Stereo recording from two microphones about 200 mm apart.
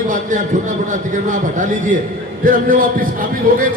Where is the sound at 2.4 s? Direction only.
45° right (ahead or behind).